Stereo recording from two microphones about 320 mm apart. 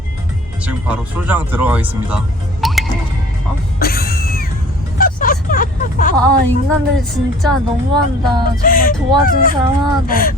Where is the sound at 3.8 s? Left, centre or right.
Left.